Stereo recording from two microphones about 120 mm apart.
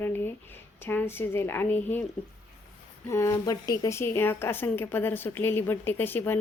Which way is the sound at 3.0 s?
25° left (ahead or behind).